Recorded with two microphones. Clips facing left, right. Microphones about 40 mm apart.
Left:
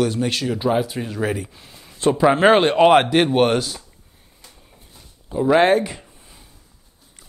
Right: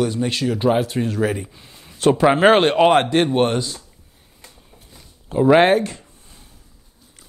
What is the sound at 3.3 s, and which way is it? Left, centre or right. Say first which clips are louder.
Speech: left 1 dB; left.